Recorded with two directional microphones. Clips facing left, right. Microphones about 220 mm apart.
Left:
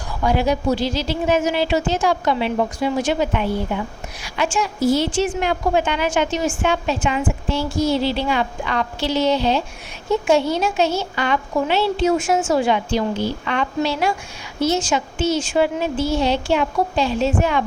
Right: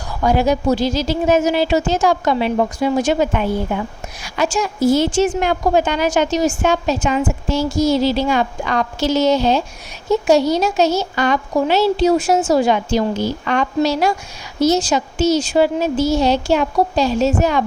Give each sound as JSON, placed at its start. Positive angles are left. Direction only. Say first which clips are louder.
{"t": 0.2, "sound": "a woman's voice", "louder": "right 3 dB", "side_deg": -45}